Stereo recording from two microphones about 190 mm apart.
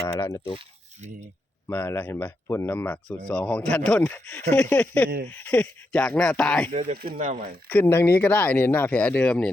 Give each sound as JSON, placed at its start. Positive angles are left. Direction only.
{"t": 0.1, "sound": "speech", "side_deg": 15}
{"t": 1.6, "sound": "speech", "side_deg": 10}
{"t": 6.7, "sound": "speech", "side_deg": -35}
{"t": 7.7, "sound": "speech", "side_deg": 10}